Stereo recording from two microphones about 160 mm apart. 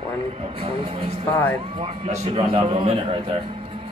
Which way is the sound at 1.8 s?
40° right (ahead or behind).